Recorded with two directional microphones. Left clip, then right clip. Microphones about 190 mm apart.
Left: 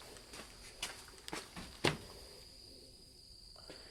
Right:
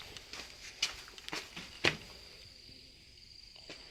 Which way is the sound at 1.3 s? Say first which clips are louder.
Right 4 dB; 50° left (ahead or behind).